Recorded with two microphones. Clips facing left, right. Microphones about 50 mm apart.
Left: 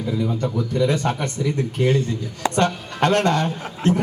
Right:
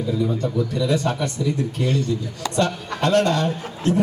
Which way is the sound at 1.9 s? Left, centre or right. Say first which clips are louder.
Left 1 dB; left.